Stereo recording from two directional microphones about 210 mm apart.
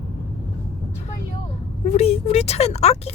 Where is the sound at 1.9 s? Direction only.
30° left (ahead or behind).